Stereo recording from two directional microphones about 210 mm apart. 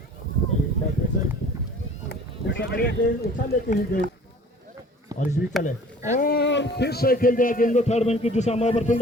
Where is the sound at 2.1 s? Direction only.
55° left (ahead or behind).